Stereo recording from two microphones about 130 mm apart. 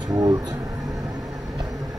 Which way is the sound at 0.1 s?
25° right (ahead or behind).